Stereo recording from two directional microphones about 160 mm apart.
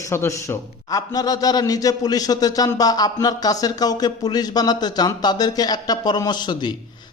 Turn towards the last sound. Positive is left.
turn(degrees=25)  # may be behind; listen again after turning